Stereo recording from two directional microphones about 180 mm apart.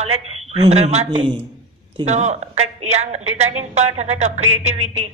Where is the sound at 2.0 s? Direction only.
40° right (ahead or behind).